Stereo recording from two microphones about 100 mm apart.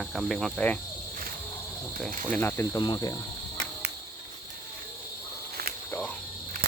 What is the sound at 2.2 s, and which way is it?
Speech, 15° left (ahead or behind).